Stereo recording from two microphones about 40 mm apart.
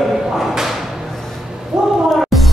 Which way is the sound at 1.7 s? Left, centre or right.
Right.